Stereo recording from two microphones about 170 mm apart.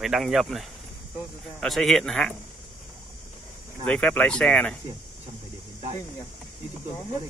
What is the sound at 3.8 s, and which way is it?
Speech, 10° left (ahead or behind).